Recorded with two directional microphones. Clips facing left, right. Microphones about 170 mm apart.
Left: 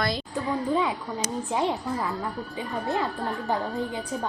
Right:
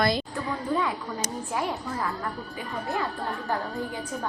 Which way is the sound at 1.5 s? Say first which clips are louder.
Left 3 dB; 25° left (ahead or behind).